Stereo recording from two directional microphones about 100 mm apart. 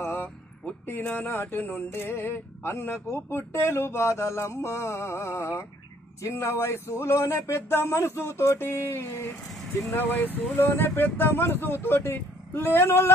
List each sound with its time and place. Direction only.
0.0 s speech: 20° left (ahead or behind)
9.5 s vehicle: centre (ahead or behind)
9.8 s speech: 20° left (ahead or behind)